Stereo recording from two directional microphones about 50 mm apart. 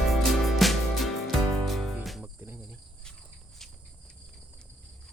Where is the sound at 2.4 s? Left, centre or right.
Right.